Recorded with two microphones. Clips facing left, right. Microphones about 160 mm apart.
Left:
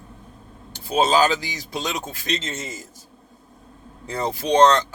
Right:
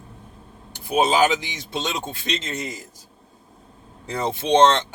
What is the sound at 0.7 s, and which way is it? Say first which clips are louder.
Speech: left 1 dB; 15° right (ahead or behind).